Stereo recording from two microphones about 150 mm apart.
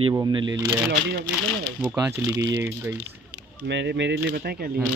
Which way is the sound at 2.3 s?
15° right (ahead or behind).